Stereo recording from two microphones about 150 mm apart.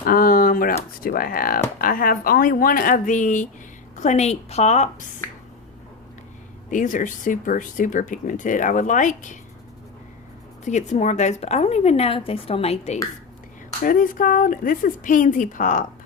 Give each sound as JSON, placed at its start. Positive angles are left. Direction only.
{"t": 0.0, "sound": "a sound", "side_deg": 75}
{"t": 1.0, "sound": "speech", "side_deg": 75}
{"t": 6.7, "sound": "speech", "side_deg": 60}
{"t": 10.7, "sound": "speech", "side_deg": 50}
{"t": 13.8, "sound": "speech", "side_deg": 65}